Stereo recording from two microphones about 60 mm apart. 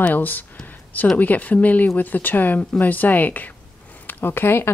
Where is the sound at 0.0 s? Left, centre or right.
Left.